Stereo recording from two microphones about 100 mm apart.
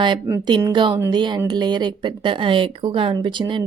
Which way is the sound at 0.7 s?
55° right (ahead or behind).